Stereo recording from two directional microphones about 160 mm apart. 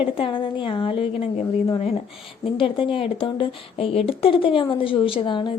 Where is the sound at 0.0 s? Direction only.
30° left (ahead or behind).